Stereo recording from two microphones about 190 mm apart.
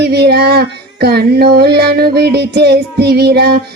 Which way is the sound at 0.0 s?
60° right (ahead or behind).